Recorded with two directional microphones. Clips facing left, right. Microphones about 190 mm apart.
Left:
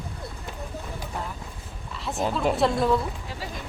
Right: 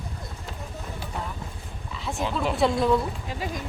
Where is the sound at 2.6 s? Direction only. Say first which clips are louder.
Right 3 dB; centre (ahead or behind).